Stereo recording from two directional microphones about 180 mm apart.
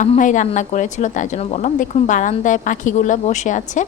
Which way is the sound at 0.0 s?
45° left (ahead or behind).